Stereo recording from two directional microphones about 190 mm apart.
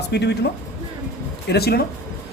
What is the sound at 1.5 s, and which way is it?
Speech, 55° left (ahead or behind).